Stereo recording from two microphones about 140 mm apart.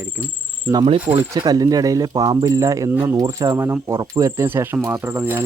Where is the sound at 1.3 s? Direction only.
25° right (ahead or behind).